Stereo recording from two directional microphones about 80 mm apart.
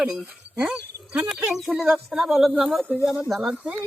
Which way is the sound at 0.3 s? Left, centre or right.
Centre.